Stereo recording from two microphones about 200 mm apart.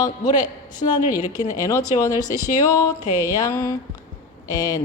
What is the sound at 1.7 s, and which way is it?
Speech, 15° left (ahead or behind).